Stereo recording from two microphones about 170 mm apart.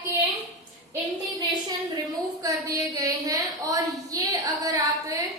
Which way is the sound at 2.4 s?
20° right (ahead or behind).